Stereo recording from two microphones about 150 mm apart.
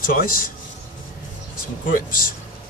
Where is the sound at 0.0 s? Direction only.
70° left (ahead or behind).